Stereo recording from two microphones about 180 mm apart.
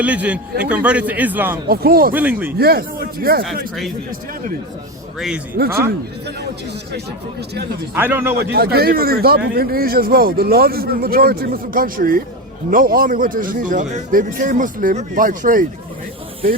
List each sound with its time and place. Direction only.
0.0 s a man's voice: 5° right (ahead or behind)
1.7 s a man's voice: 55° right (ahead or behind)
2.1 s a man's voice: 10° right (ahead or behind)
2.6 s a man's voice: 55° right (ahead or behind)
5.6 s a man's voice: 60° right (ahead or behind)
7.9 s a man's voice: 10° right (ahead or behind)
8.4 s a man's voice: 60° right (ahead or behind)